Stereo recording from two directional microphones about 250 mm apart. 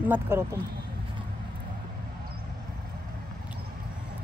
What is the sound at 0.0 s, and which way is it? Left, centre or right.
Speech, centre.